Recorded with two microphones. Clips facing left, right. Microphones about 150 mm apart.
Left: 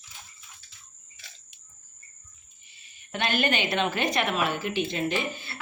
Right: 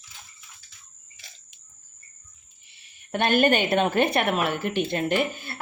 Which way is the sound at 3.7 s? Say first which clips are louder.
Right 5 dB; 50° right (ahead or behind).